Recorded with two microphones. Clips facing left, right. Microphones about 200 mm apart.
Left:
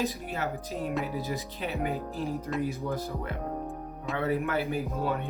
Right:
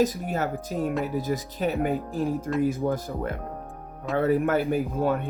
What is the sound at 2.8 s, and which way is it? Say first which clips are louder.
Speech: right 5 dB; 50° right (ahead or behind).